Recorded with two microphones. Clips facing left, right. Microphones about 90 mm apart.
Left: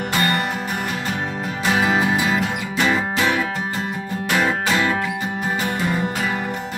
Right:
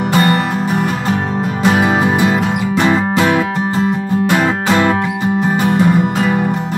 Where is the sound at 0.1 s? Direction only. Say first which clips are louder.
Right 7 dB; 35° right (ahead or behind).